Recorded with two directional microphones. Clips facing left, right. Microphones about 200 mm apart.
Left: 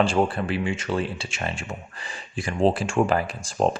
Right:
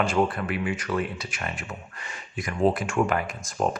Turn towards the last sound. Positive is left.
turn(degrees=30)  # may be behind; listen again after turning